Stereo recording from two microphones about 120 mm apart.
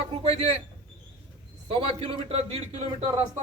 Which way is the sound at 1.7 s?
55° right (ahead or behind).